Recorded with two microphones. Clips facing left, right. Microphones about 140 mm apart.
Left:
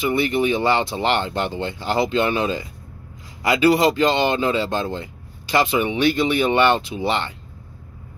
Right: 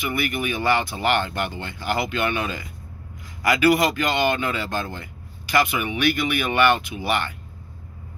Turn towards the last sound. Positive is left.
turn(degrees=25)  # may be behind; listen again after turning